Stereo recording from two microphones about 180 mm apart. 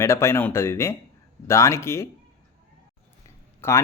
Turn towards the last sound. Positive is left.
turn(degrees=15)  # may be behind; listen again after turning